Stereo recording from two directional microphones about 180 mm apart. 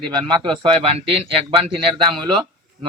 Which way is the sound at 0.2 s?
25° right (ahead or behind).